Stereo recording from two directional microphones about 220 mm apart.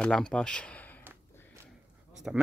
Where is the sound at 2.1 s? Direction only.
Centre (ahead or behind).